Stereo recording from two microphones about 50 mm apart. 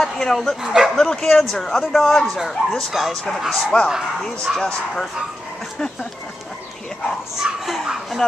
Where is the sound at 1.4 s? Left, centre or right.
Centre.